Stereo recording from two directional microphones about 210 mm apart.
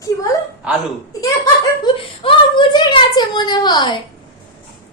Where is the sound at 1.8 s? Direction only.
25° left (ahead or behind).